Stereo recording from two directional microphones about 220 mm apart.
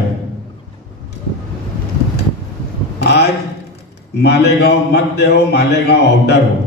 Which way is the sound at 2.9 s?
50° left (ahead or behind).